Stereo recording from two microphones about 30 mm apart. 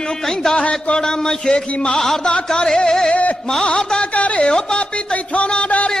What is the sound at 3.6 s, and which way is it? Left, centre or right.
Music, left.